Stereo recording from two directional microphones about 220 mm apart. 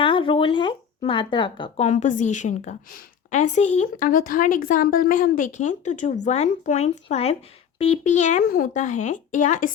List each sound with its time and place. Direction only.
0.0 s a woman's voice: 25° left (ahead or behind)